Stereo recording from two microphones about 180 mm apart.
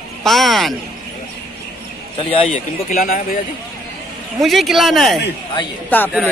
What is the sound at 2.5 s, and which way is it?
Speech, 50° left (ahead or behind).